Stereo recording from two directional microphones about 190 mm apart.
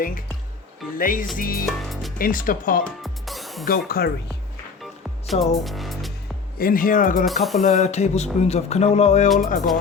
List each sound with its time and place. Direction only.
0.9 s speech: 45° left (ahead or behind)
1.6 s music: centre (ahead or behind)
2.1 s speech: 45° left (ahead or behind)
2.8 s music: centre (ahead or behind)
3.7 s speech: 50° left (ahead or behind)
4.8 s music: centre (ahead or behind)
6.6 s speech: 50° left (ahead or behind)
7.3 s speech: centre (ahead or behind)
7.6 s speech: 40° left (ahead or behind)